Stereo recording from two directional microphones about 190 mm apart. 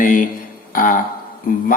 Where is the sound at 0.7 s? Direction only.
45° left (ahead or behind).